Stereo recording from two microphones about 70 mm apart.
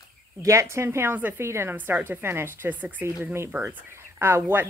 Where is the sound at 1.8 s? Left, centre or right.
Right.